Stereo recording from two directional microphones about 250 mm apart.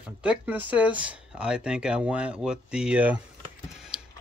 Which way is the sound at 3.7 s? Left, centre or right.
Centre.